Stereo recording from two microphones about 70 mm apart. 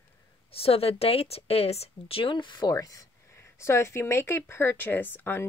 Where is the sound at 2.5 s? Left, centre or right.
Left.